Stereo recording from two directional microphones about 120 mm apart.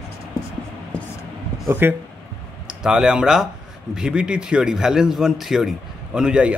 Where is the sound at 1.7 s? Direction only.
15° right (ahead or behind).